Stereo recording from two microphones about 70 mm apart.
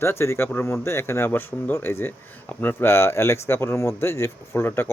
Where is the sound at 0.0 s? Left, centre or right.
Left.